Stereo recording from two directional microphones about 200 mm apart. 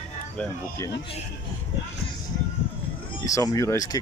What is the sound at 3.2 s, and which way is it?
Speech, 15° left (ahead or behind).